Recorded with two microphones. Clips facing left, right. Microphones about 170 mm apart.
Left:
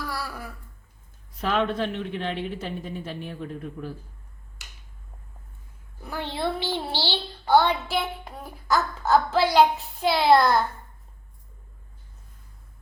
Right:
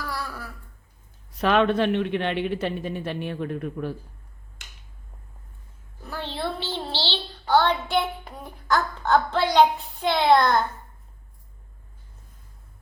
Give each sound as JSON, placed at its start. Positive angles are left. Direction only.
{"t": 0.0, "sound": "a sound", "side_deg": 5}
{"t": 1.4, "sound": "a man's voice", "side_deg": -70}
{"t": 6.0, "sound": "a child's voice", "side_deg": 15}